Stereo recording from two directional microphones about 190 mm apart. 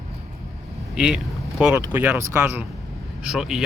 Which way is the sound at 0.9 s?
5° right (ahead or behind).